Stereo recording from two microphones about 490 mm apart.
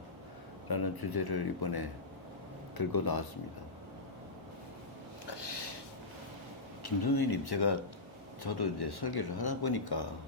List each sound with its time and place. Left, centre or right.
0.7 s speech: left
5.2 s a sound: left
6.8 s speech: left